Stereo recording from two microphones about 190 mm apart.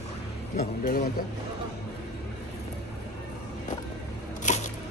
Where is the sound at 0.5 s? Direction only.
40° left (ahead or behind).